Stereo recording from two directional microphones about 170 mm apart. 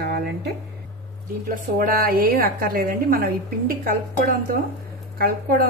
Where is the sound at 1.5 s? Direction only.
55° right (ahead or behind).